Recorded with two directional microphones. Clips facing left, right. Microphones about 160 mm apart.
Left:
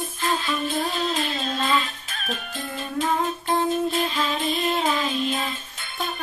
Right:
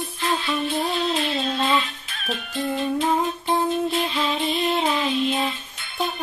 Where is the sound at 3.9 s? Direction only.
45° left (ahead or behind).